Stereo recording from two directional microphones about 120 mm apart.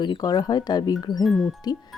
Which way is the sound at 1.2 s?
Centre (ahead or behind).